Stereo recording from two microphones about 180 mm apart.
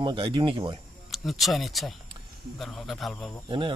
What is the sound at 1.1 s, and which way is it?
A man's voice, centre (ahead or behind).